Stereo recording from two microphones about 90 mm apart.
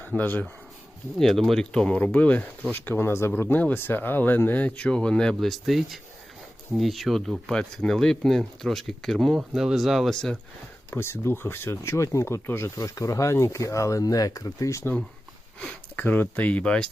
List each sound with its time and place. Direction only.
0.2 s speech: 20° left (ahead or behind)
1.2 s speech: 5° left (ahead or behind)
10.9 s speech: 30° left (ahead or behind)
16.0 s speech: 20° left (ahead or behind)